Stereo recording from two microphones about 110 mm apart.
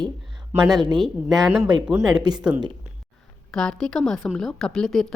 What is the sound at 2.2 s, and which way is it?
Speech, 40° right (ahead or behind).